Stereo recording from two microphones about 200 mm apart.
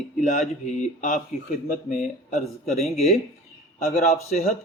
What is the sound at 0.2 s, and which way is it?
A man's voice, 35° left (ahead or behind).